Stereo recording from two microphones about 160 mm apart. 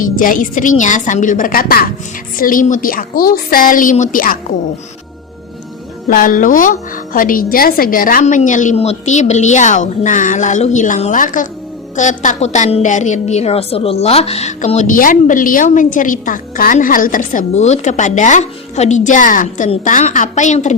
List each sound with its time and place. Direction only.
0.0 s a woman's voice: 55° left (ahead or behind)
6.1 s a woman's voice: 60° left (ahead or behind)